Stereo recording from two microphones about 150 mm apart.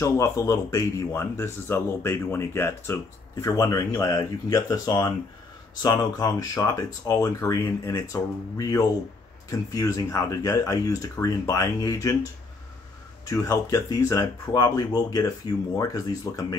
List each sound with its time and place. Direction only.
0.0 s speech: 20° left (ahead or behind)
13.2 s speech: 20° left (ahead or behind)